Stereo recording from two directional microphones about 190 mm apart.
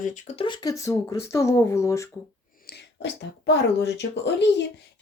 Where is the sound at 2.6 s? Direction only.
65° left (ahead or behind).